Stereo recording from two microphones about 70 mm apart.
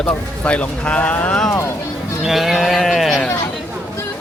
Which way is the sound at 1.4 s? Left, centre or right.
Left.